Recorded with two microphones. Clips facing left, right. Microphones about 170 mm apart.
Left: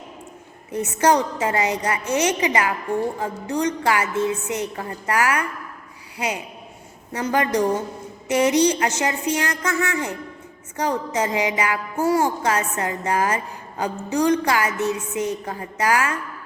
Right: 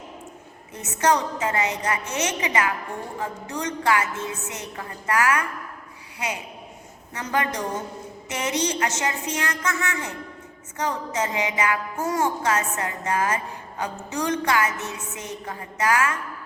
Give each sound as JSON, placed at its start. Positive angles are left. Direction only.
{"t": 0.7, "sound": "music", "side_deg": 30}
{"t": 7.1, "sound": "music", "side_deg": 30}